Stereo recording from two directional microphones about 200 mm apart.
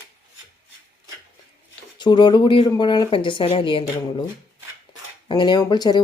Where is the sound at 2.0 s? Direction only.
25° left (ahead or behind).